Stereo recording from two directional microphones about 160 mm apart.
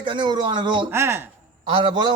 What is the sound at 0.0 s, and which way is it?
Speech, 30° right (ahead or behind).